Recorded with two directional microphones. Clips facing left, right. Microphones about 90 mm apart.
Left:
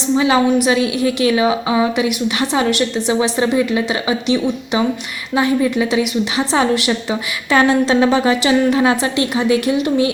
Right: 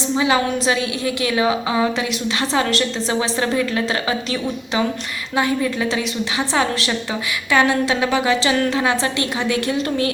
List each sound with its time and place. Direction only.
0.2 s a woman's voice: 25° left (ahead or behind)